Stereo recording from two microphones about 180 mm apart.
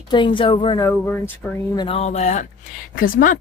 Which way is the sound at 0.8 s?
10° left (ahead or behind).